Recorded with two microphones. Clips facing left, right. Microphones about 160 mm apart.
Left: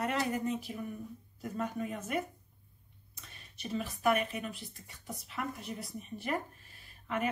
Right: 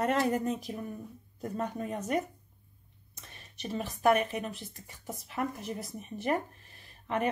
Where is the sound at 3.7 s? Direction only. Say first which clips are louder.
Right 4 dB; 40° right (ahead or behind).